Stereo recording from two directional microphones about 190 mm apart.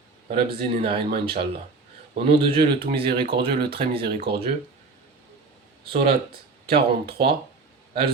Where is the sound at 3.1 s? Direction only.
55° right (ahead or behind).